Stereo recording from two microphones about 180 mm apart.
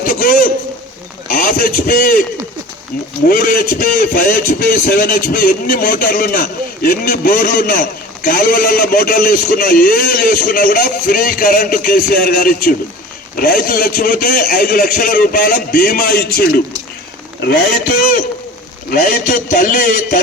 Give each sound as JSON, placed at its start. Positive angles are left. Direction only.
{"t": 0.0, "sound": "a sound", "side_deg": 50}
{"t": 1.3, "sound": "a man's voice", "side_deg": 50}
{"t": 3.2, "sound": "a man's voice", "side_deg": 50}